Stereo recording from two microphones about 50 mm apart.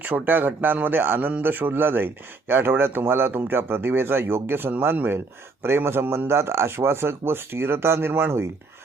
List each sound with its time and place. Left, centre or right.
0.0 s a man's voice: right